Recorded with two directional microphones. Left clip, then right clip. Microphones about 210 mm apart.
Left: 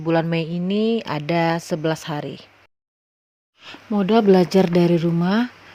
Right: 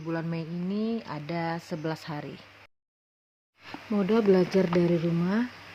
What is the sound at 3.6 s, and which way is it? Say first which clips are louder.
Speech: left 6 dB; 35° left (ahead or behind).